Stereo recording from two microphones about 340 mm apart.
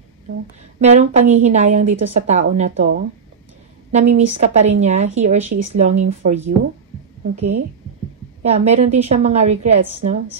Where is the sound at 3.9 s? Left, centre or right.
Centre.